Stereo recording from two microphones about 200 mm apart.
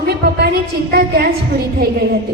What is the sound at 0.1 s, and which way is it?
A woman's voice, 55° right (ahead or behind).